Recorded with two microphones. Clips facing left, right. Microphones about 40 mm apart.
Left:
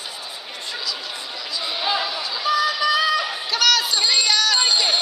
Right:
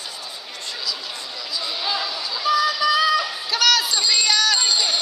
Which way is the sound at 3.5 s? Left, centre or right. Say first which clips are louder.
Even; centre.